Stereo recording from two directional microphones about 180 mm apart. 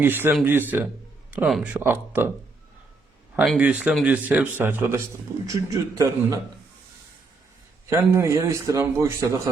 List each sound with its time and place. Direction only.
0.0 s a man's voice: 10° right (ahead or behind)
3.4 s a man's voice: 5° right (ahead or behind); by 6.4 s 20° right (ahead or behind)
7.9 s a man's voice: 15° right (ahead or behind)